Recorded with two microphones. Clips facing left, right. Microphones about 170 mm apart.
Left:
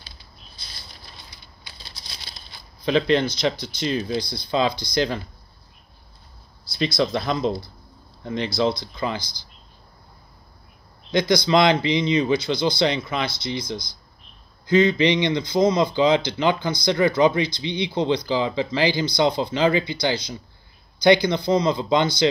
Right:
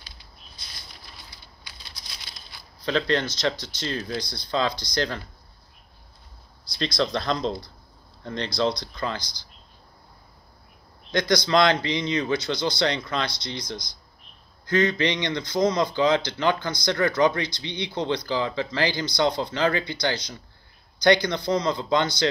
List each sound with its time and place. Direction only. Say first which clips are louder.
0.6 s patter: left 1 dB; 30° left (ahead or behind)
1.3 s a sound: left 1 dB; 25° left (ahead or behind)
2.8 s speech: left 5 dB; 15° left (ahead or behind)
6.7 s speech: left 3 dB; 10° left (ahead or behind)
11.1 s speech: left 3 dB; 10° left (ahead or behind)